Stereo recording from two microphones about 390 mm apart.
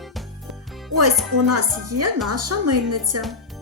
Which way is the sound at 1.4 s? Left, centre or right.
Right.